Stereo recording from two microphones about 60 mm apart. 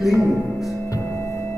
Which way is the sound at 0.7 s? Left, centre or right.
Left.